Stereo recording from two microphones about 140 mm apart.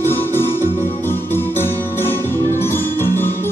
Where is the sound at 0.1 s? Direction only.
15° left (ahead or behind).